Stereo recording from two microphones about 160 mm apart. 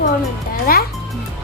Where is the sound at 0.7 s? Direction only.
65° left (ahead or behind).